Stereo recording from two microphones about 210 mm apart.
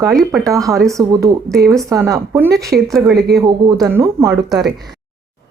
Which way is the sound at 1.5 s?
Centre (ahead or behind).